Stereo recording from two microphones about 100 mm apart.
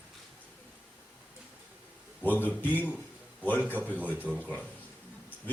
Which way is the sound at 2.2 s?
20° left (ahead or behind).